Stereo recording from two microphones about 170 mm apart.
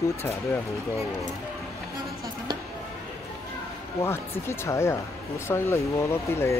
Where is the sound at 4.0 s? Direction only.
15° left (ahead or behind).